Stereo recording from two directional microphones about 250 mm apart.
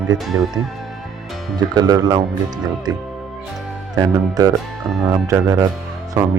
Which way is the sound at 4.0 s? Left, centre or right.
Centre.